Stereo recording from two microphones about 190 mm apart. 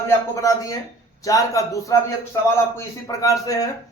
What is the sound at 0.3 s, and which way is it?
Speech, 15° left (ahead or behind).